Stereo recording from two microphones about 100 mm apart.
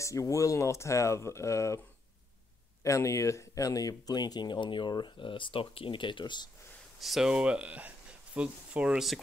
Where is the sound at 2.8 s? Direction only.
30° left (ahead or behind); by 6.4 s 55° left (ahead or behind).